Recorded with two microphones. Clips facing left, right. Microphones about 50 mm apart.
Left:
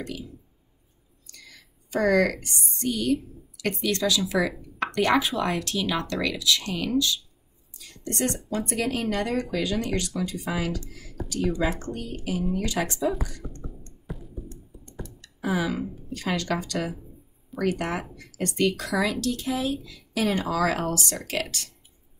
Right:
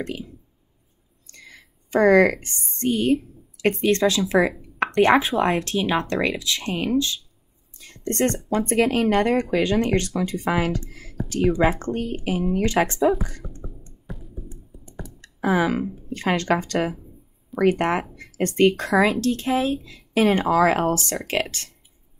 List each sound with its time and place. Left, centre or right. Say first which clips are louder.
0.0 s a woman's voice: right 5 dB; right
14.0 s a sound: even; centre
15.2 s speech: right 6 dB; right